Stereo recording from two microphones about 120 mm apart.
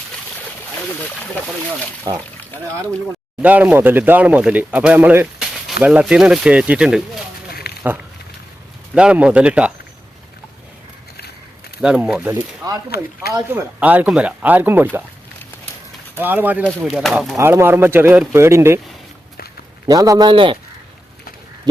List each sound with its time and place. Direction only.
2.1 s a man's voice: 35° right (ahead or behind)
3.4 s speech: 15° right (ahead or behind)
9.0 s speech: 10° right (ahead or behind)
11.8 s speech: 10° right (ahead or behind)
13.5 s speech: 15° right (ahead or behind)
16.1 s speech: 15° right (ahead or behind)
16.8 s speech: 5° right (ahead or behind)
17.3 s a man's voice: 25° right (ahead or behind)
19.9 s a man's voice: 30° right (ahead or behind); by 20.6 s 45° right (ahead or behind)